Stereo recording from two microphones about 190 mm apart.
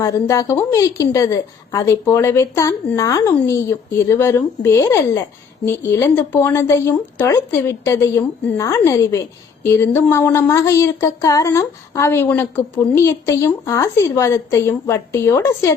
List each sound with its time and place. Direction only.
0.0 s speech: 15° left (ahead or behind)